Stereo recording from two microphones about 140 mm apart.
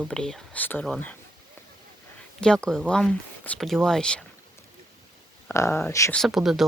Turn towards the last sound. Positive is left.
turn(degrees=0)  # may be behind; listen again after turning